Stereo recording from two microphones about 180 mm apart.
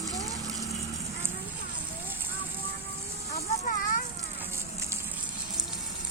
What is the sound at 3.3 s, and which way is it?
Vehicle, 40° left (ahead or behind).